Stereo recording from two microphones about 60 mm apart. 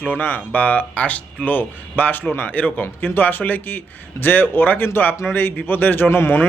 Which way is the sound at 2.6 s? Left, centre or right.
Left.